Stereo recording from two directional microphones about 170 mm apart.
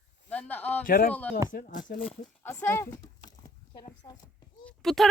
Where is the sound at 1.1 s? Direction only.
10° left (ahead or behind).